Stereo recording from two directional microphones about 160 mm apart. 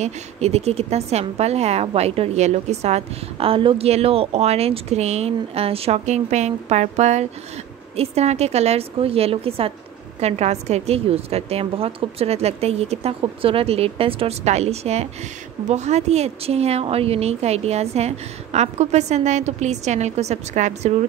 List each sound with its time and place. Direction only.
0.0 s a woman's voice: 40° right (ahead or behind)